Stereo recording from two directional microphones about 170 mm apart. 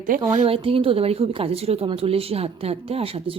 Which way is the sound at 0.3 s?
35° right (ahead or behind).